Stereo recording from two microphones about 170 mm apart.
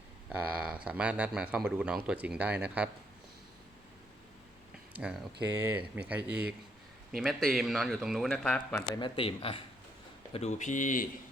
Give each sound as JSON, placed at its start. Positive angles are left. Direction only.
{"t": 0.3, "sound": "speech", "side_deg": -10}
{"t": 4.9, "sound": "speech", "side_deg": -5}
{"t": 9.0, "sound": "speech", "side_deg": 30}
{"t": 10.3, "sound": "speech", "side_deg": 45}